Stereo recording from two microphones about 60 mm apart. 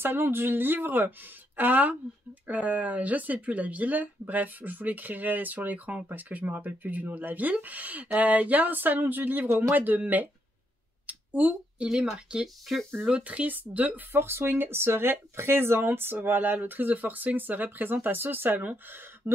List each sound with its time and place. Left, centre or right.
0.0 s speech: right
11.1 s a sound: right
12.3 s speech: centre
14.1 s speech: right